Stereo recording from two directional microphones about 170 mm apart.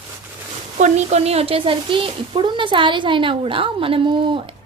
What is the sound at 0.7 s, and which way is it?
Speech, 40° right (ahead or behind).